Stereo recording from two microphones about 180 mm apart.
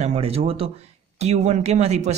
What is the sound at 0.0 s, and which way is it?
Speech, 35° right (ahead or behind).